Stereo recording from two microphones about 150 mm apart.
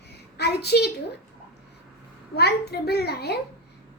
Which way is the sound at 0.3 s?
90° left.